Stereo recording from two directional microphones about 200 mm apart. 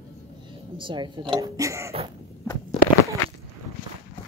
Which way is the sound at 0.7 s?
25° right (ahead or behind).